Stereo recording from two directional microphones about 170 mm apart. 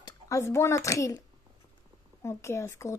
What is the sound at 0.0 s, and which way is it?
Speech, 15° left (ahead or behind).